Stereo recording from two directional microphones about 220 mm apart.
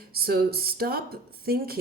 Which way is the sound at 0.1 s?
45° right (ahead or behind).